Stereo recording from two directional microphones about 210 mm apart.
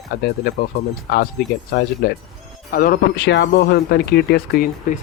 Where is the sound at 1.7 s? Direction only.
50° left (ahead or behind).